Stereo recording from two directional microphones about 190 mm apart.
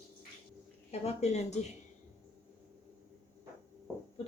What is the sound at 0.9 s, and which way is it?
Speech, 35° left (ahead or behind).